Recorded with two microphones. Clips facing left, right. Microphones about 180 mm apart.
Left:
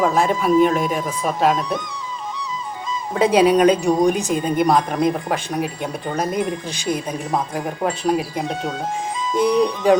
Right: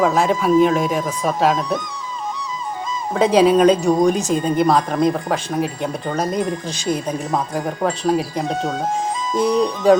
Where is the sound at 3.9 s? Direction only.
10° left (ahead or behind).